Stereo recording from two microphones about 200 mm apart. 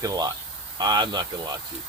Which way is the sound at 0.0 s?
20° right (ahead or behind).